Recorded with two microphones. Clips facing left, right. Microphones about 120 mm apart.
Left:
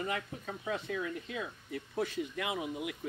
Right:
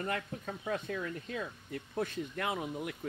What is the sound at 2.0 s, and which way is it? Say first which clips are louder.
Speech: even; 50° right (ahead or behind).